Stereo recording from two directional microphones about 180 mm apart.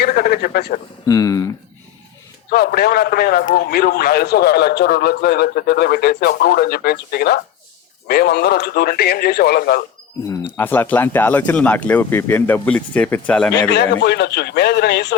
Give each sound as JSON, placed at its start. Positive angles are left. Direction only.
{"t": 0.0, "sound": "a sound", "side_deg": 55}
{"t": 1.0, "sound": "speech", "side_deg": 20}
{"t": 2.5, "sound": "a man's voice", "side_deg": 60}
{"t": 10.2, "sound": "speech", "side_deg": 10}
{"t": 13.7, "sound": "speech", "side_deg": 70}